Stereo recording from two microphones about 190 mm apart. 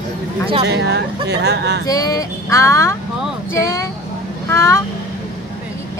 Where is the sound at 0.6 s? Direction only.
60° right (ahead or behind).